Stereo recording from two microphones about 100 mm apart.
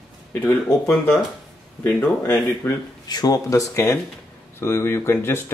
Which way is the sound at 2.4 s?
40° left (ahead or behind).